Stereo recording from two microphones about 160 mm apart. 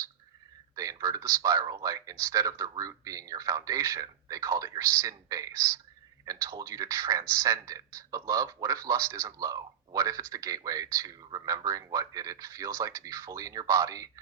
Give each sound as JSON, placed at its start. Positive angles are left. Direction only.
{"t": 0.8, "sound": "speech", "side_deg": -20}